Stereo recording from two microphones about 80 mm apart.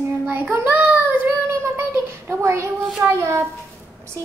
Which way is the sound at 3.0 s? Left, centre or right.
Right.